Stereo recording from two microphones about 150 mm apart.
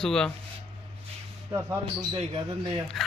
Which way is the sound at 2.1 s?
40° right (ahead or behind).